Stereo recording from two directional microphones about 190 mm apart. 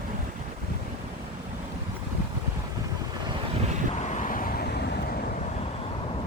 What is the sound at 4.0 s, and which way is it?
Vehicle, 40° left (ahead or behind).